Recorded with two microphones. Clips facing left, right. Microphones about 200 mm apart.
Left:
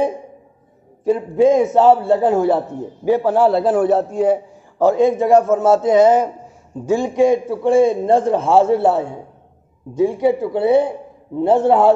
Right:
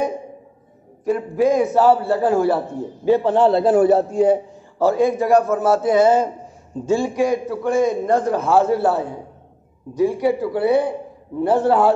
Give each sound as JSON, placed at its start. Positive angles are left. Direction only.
{"t": 1.0, "sound": "a man's voice", "side_deg": 25}
{"t": 4.7, "sound": "a man's voice", "side_deg": 20}